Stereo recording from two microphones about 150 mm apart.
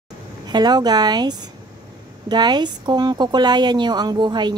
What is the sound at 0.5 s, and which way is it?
A woman's voice, 30° right (ahead or behind).